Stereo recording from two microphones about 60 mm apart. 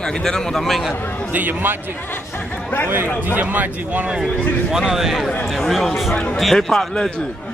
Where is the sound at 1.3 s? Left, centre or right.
Right.